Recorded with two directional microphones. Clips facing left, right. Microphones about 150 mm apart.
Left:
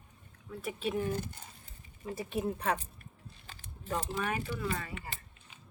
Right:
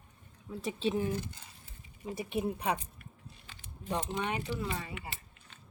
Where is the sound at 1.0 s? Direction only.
50° left (ahead or behind).